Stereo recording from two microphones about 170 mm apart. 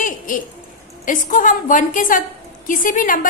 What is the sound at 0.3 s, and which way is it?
A woman's voice, 50° left (ahead or behind).